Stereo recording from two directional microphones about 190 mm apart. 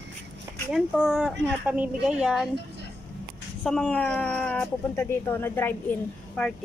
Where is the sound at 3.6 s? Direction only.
5° left (ahead or behind).